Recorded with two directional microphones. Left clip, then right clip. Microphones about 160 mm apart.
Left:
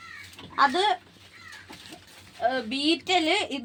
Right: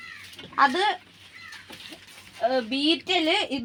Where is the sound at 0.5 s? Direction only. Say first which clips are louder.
Right 1 dB; 55° right (ahead or behind).